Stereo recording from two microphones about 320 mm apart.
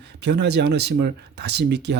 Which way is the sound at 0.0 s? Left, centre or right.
Right.